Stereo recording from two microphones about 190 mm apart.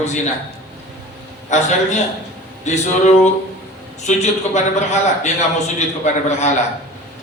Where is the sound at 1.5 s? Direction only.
40° left (ahead or behind).